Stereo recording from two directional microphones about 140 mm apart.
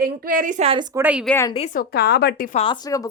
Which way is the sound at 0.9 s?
10° right (ahead or behind).